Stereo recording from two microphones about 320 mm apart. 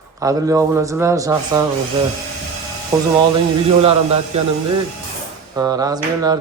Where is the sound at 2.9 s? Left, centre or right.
Centre.